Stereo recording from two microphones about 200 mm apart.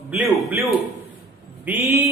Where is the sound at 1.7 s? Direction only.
10° right (ahead or behind).